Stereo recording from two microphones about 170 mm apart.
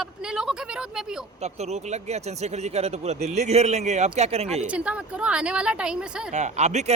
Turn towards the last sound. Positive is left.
turn(degrees=-40)  # may be behind; listen again after turning